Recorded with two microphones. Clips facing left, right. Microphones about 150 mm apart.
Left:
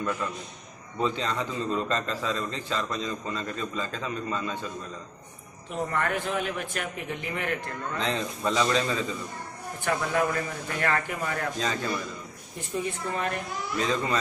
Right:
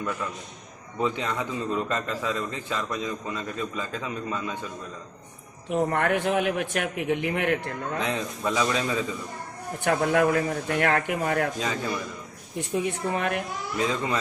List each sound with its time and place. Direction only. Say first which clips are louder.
0.0 s a man's voice: left 1 dB; 5° right (ahead or behind)
5.7 s a man's voice: right 5 dB; 60° right (ahead or behind)
8.0 s a man's voice: left 1 dB; 10° right (ahead or behind)
9.8 s a man's voice: right 5 dB; 55° right (ahead or behind)
11.5 s a man's voice: right 1 dB; 15° right (ahead or behind)
12.5 s a man's voice: right 4 dB; 60° right (ahead or behind)
13.7 s a man's voice: right 1 dB; 15° right (ahead or behind)